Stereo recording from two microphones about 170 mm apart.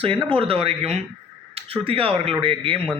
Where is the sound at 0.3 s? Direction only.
35° right (ahead or behind).